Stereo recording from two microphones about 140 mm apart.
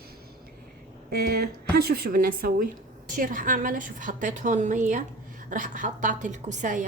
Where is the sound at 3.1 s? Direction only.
70° right (ahead or behind).